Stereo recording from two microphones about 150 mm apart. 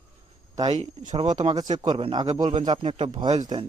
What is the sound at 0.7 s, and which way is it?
Speech, 45° right (ahead or behind).